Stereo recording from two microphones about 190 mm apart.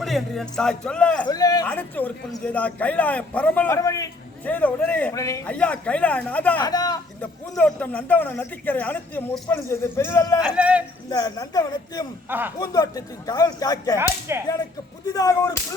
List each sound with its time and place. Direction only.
0.0 s speech: centre (ahead or behind)
1.3 s a sound: 20° left (ahead or behind)
1.6 s speech: 10° left (ahead or behind)
5.5 s speech: 5° left (ahead or behind)
6.6 s speech: 20° left (ahead or behind)
7.2 s speech: 5° left (ahead or behind)
10.6 s speech: 5° right (ahead or behind)
11.1 s speech: 20° left (ahead or behind)
12.3 s speech: 10° right (ahead or behind)
12.5 s speech: 20° left (ahead or behind)
14.3 s speech: 15° right (ahead or behind)
15.0 s speech: 20° left (ahead or behind)